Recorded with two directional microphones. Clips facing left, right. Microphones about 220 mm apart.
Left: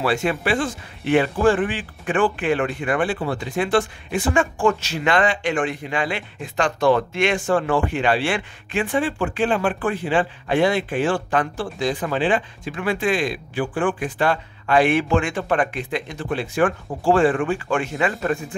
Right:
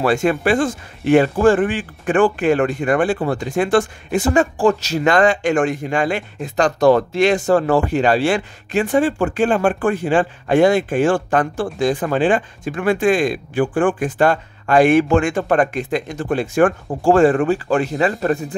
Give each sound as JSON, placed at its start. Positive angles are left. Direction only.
{"t": 0.0, "sound": "speech", "side_deg": -45}